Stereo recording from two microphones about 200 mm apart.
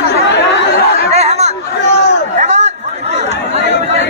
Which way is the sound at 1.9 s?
60° left (ahead or behind).